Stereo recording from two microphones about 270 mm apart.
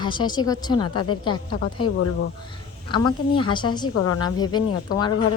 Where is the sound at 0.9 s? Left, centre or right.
Left.